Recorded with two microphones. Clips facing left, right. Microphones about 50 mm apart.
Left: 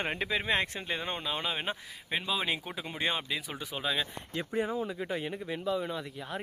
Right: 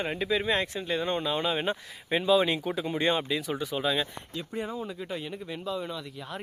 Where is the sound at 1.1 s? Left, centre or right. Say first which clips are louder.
Right 6 dB; centre.